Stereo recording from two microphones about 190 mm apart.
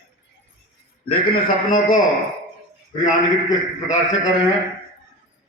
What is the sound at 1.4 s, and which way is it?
Speech, 45° left (ahead or behind).